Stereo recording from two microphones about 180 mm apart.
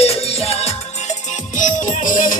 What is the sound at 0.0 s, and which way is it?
Music, 35° left (ahead or behind).